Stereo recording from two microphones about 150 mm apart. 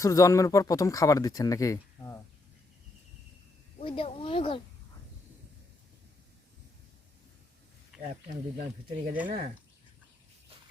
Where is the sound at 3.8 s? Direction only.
35° left (ahead or behind).